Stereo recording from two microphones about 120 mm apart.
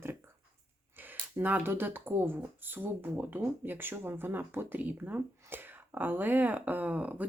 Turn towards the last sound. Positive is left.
turn(degrees=-10)  # may be behind; listen again after turning